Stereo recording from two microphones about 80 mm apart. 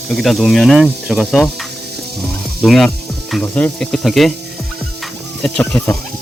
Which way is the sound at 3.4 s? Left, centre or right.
Left.